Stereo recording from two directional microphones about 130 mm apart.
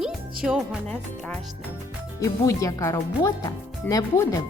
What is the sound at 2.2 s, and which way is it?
Speech, 25° left (ahead or behind).